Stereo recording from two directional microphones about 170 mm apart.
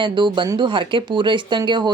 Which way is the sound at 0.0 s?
30° right (ahead or behind).